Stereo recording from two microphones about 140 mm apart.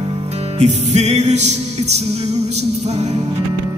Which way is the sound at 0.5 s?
55° right (ahead or behind).